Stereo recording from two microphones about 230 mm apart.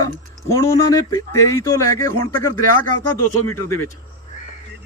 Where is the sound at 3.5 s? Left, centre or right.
Centre.